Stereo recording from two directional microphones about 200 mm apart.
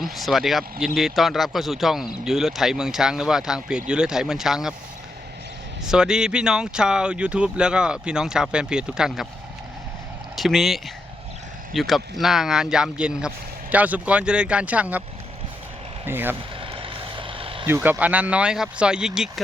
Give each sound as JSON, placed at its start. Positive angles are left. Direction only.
{"t": 0.0, "sound": "speech", "side_deg": 0}
{"t": 5.9, "sound": "speech", "side_deg": -5}
{"t": 10.3, "sound": "speech", "side_deg": 0}
{"t": 16.0, "sound": "speech", "side_deg": -10}
{"t": 16.6, "sound": "vehicle", "side_deg": -25}
{"t": 17.7, "sound": "speech", "side_deg": -10}